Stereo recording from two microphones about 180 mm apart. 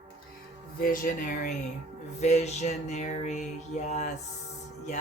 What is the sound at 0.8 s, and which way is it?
Speech, 50° left (ahead or behind).